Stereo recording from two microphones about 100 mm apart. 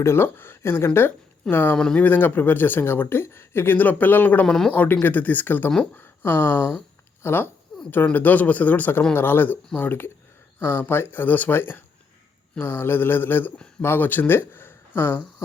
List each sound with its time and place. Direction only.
0.0 s speech: 25° left (ahead or behind)
5.9 s a sound: 20° left (ahead or behind)
7.2 s a man's voice: 25° left (ahead or behind)